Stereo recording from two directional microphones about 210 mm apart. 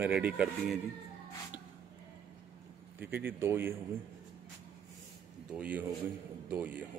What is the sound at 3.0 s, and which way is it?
Speech, 10° right (ahead or behind).